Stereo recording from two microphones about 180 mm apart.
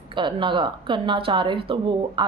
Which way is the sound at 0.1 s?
25° right (ahead or behind).